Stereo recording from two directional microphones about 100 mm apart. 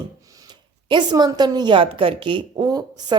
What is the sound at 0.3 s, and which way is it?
A woman's voice, 45° right (ahead or behind).